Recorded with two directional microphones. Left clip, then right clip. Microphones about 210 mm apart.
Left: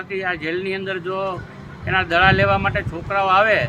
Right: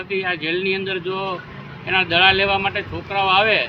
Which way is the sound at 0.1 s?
50° left (ahead or behind).